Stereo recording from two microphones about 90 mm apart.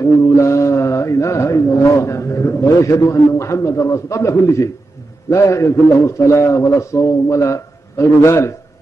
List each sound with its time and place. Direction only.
0.0 s mantra: 35° left (ahead or behind)
5.3 s a man's voice: 35° left (ahead or behind)